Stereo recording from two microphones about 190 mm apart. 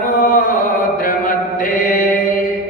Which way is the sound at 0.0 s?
45° left (ahead or behind).